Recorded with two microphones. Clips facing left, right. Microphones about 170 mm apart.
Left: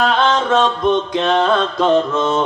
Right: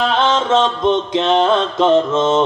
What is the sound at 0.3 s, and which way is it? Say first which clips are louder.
Mantra: even; 25° right (ahead or behind).